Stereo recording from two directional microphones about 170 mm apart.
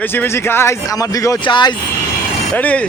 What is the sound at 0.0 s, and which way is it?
Speech, 10° left (ahead or behind).